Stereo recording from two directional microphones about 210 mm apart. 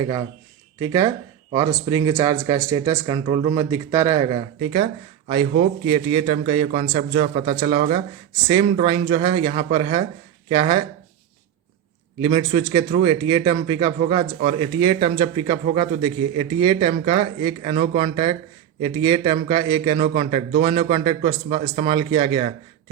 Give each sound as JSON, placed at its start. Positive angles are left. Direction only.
{"t": 0.0, "sound": "speech", "side_deg": -15}
{"t": 12.2, "sound": "speech", "side_deg": -20}